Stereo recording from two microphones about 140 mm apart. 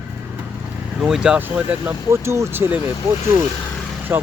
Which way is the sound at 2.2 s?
20° right (ahead or behind).